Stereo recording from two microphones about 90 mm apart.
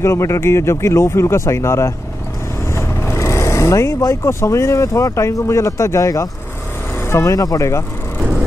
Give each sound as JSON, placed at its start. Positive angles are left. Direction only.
{"t": 0.0, "sound": "speech", "side_deg": 30}